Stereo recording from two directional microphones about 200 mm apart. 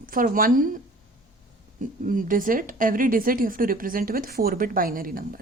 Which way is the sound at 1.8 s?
40° right (ahead or behind).